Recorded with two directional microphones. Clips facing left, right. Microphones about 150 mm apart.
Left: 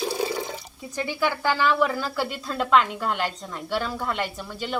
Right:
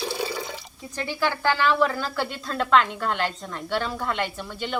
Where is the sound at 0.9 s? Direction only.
10° left (ahead or behind).